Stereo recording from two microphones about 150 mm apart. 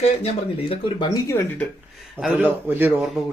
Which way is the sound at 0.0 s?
40° left (ahead or behind).